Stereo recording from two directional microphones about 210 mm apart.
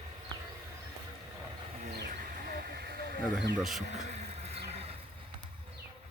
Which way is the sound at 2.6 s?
50° right (ahead or behind).